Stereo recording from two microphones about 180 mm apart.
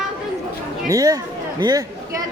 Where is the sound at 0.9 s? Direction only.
20° right (ahead or behind).